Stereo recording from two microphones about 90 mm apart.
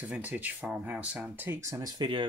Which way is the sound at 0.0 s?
20° right (ahead or behind).